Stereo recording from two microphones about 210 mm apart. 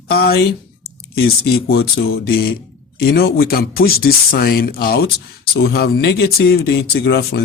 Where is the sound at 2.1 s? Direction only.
45° left (ahead or behind).